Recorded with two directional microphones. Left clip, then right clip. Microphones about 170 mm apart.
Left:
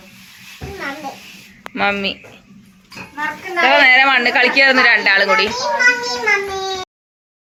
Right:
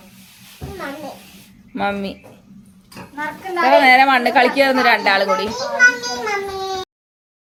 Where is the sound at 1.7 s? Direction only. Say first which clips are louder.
Left 4 dB; 10° right (ahead or behind).